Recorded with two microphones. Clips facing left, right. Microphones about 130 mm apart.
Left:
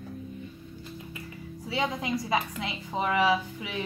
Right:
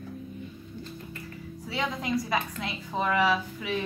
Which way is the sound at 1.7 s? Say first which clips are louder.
Even; 20° left (ahead or behind).